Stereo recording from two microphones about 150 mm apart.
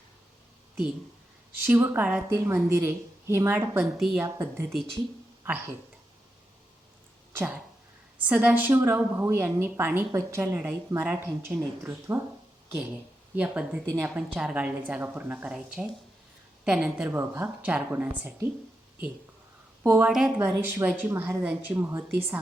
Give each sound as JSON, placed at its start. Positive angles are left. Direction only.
{"t": 1.6, "sound": "a woman's voice", "side_deg": -15}
{"t": 3.9, "sound": "a woman's voice", "side_deg": -5}
{"t": 4.2, "sound": "a woman's voice", "side_deg": -15}
{"t": 7.3, "sound": "a woman's voice", "side_deg": -10}
{"t": 13.3, "sound": "a woman's voice", "side_deg": -10}
{"t": 19.8, "sound": "speech", "side_deg": -15}
{"t": 20.1, "sound": "a woman's voice", "side_deg": -5}
{"t": 20.3, "sound": "a woman's voice", "side_deg": -15}